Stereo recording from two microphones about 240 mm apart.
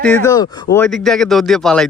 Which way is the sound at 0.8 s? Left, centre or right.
Centre.